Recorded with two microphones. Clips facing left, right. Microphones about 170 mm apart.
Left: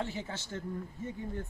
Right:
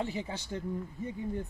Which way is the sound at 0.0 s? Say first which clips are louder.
Right 2 dB; 15° right (ahead or behind).